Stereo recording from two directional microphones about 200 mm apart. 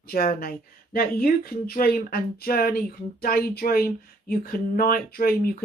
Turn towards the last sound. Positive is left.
turn(degrees=50)  # may be behind; listen again after turning